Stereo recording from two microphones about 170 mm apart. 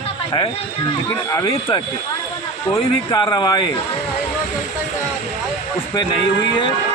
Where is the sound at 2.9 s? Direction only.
25° left (ahead or behind).